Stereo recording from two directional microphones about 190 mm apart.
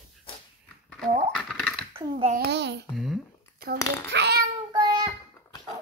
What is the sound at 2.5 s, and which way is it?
Babbling, 65° right (ahead or behind).